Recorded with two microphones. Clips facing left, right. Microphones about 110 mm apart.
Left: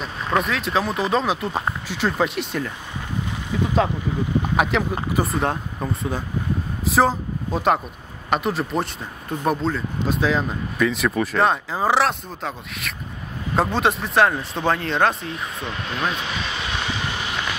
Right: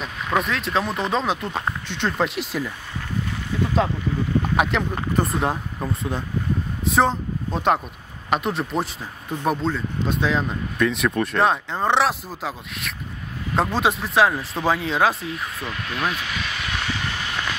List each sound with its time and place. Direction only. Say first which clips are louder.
0.0 s speech: left 1 dB; centre (ahead or behind)
4.6 s speech: left 1 dB; centre (ahead or behind)
15.7 s vehicle: left 1 dB; 25° left (ahead or behind)